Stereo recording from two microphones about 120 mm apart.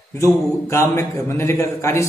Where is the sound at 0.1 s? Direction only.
20° left (ahead or behind).